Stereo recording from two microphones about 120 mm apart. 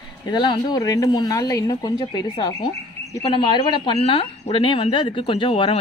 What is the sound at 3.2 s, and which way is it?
Speech, 45° left (ahead or behind).